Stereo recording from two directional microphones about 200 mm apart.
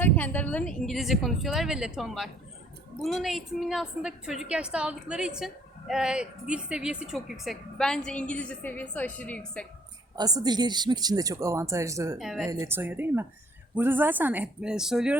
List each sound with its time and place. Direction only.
0.0 s a woman's voice: 10° left (ahead or behind)
10.2 s a woman's voice: 20° right (ahead or behind)
12.1 s a woman's voice: centre (ahead or behind)
12.5 s speech: 15° right (ahead or behind)